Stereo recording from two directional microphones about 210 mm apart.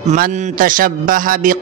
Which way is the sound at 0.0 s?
35° right (ahead or behind).